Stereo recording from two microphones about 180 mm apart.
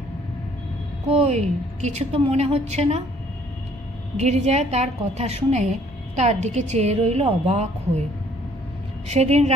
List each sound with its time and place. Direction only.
1.1 s a woman's voice: 40° right (ahead or behind)
4.2 s a woman's voice: 40° right (ahead or behind)
9.1 s a woman's voice: 35° right (ahead or behind)